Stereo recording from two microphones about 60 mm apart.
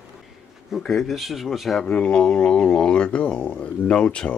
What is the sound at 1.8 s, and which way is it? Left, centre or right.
Speech, centre.